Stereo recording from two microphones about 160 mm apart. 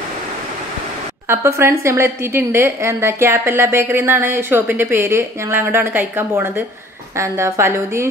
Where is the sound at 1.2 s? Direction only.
15° right (ahead or behind).